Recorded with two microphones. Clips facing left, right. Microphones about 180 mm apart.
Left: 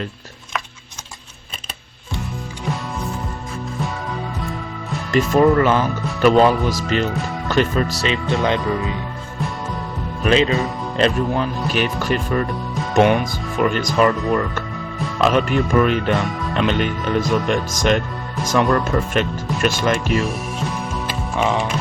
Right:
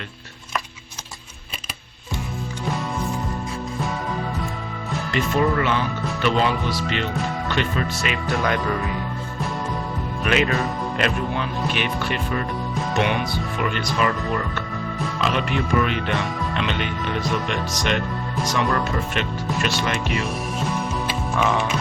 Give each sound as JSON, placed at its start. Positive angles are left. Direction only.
{"t": 5.1, "sound": "speech", "side_deg": 45}
{"t": 8.0, "sound": "speech", "side_deg": 25}
{"t": 10.2, "sound": "speech", "side_deg": 25}
{"t": 15.2, "sound": "speech", "side_deg": 45}
{"t": 21.3, "sound": "speech", "side_deg": 25}